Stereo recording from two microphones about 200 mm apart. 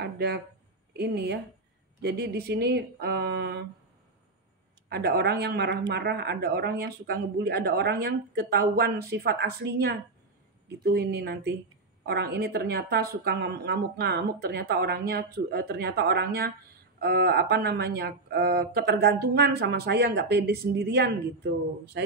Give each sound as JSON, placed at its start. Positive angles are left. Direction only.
{"t": 0.0, "sound": "a sound", "side_deg": -55}
{"t": 0.9, "sound": "speech", "side_deg": -55}
{"t": 4.8, "sound": "speech", "side_deg": -50}